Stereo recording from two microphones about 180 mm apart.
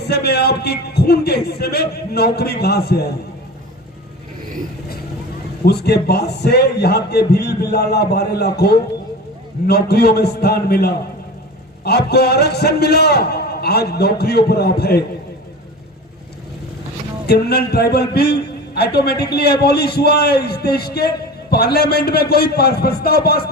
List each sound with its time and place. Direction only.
0.0 s a man's voice: 65° left (ahead or behind)
5.6 s a man's voice: 65° left (ahead or behind)
17.2 s a man's voice: 65° left (ahead or behind)